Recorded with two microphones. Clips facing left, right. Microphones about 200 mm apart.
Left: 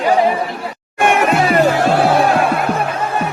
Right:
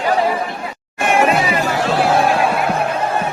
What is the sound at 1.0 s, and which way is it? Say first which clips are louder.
Music: left 1 dB; 60° left (ahead or behind).